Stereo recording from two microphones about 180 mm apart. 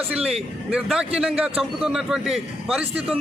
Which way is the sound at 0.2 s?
35° right (ahead or behind).